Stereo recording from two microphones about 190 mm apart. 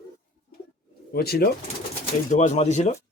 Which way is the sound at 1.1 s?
55° left (ahead or behind).